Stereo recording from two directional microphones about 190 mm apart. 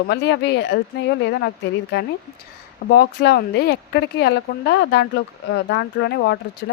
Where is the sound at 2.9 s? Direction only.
60° left (ahead or behind).